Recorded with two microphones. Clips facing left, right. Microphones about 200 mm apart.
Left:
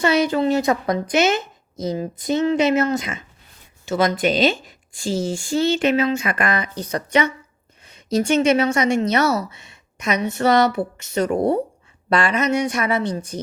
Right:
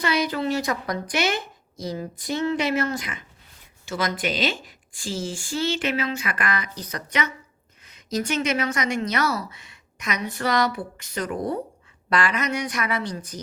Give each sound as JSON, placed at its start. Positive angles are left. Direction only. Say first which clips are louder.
{"t": 0.0, "sound": "a woman's voice", "louder": "left 6 dB", "side_deg": 25}